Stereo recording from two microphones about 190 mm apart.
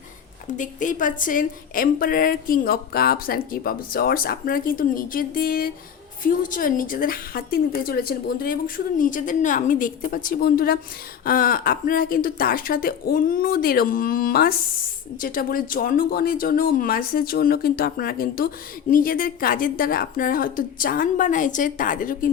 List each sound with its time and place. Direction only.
0.4 s speech: 40° left (ahead or behind)